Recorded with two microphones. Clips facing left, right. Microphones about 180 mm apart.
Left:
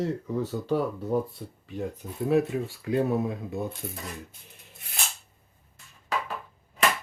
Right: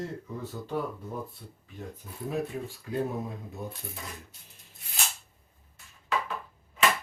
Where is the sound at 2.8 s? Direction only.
80° left.